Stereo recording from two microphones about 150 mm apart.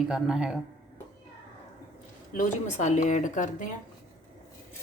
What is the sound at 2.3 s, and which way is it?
Speech, 60° left (ahead or behind).